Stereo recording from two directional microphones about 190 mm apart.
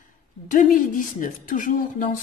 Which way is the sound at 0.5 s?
45° left (ahead or behind).